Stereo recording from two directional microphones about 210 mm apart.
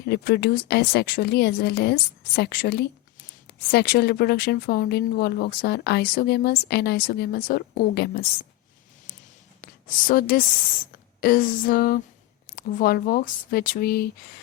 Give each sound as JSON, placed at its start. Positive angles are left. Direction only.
{"t": 0.0, "sound": "speech", "side_deg": 50}
{"t": 10.1, "sound": "speech", "side_deg": 45}